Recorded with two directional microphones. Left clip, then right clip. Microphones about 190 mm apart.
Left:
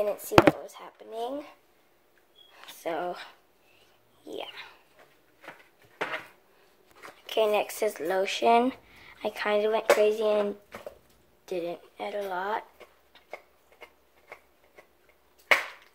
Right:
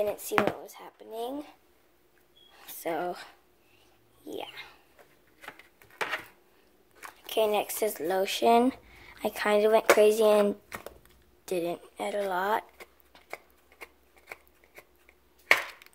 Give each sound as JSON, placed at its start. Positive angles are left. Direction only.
{"t": 0.0, "sound": "speech", "side_deg": -20}
{"t": 2.5, "sound": "a sound", "side_deg": -25}
{"t": 4.2, "sound": "dog", "side_deg": -25}
{"t": 7.2, "sound": "speech", "side_deg": -25}